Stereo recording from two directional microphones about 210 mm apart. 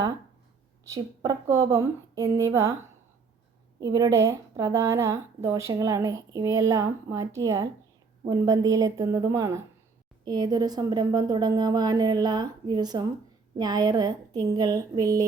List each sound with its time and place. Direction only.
0.9 s a woman's voice: 15° right (ahead or behind)
3.8 s a woman's voice: 20° right (ahead or behind)